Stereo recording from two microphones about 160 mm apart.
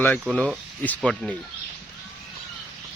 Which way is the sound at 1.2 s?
5° left (ahead or behind).